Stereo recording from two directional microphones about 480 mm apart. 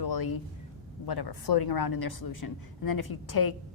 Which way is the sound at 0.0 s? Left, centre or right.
Left.